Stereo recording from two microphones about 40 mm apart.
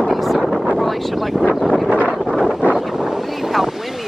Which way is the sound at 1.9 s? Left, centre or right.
Right.